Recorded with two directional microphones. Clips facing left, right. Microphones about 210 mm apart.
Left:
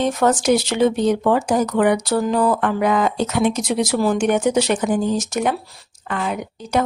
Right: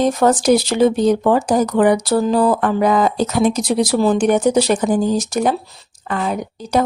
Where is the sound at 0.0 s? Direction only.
35° right (ahead or behind).